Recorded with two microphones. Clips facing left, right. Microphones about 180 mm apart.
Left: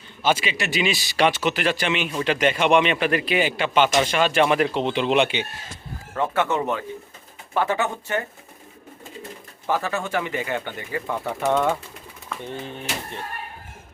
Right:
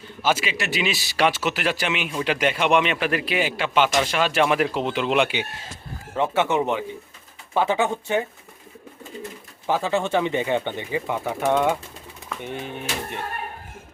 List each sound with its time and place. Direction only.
0.2 s a man's voice: 5° right (ahead or behind)
6.1 s speech: 20° right (ahead or behind)
9.6 s speech: 15° right (ahead or behind)